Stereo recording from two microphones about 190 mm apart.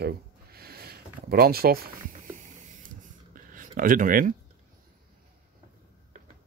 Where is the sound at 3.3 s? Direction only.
45° right (ahead or behind).